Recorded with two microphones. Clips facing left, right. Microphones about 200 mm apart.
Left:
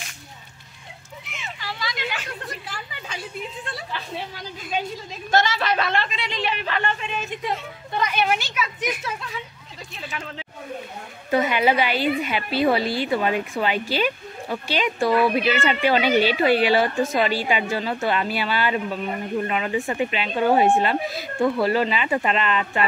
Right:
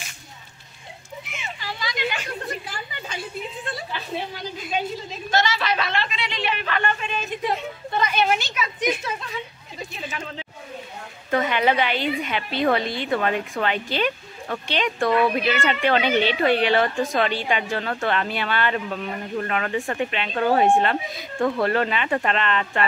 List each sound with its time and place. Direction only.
1.4 s a sound: centre (ahead or behind)
5.3 s a woman's voice: 50° left (ahead or behind); by 6.9 s 30° left (ahead or behind)
8.0 s a woman's voice: 10° left (ahead or behind)
9.9 s a woman's voice: centre (ahead or behind)
11.2 s a woman's voice: 10° left (ahead or behind)